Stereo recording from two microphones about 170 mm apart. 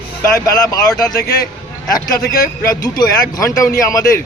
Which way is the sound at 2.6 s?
20° left (ahead or behind).